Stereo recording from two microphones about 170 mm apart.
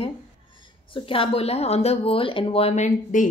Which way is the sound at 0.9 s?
30° left (ahead or behind).